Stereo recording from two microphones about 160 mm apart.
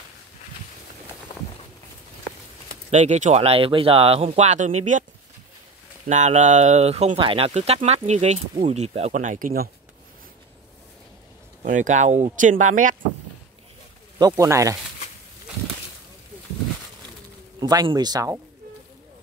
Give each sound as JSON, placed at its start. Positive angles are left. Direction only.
{"t": 2.9, "sound": "speech", "side_deg": -45}
{"t": 6.0, "sound": "speech", "side_deg": -50}
{"t": 11.6, "sound": "speech", "side_deg": -50}
{"t": 14.1, "sound": "speech", "side_deg": -20}
{"t": 17.6, "sound": "speech", "side_deg": -25}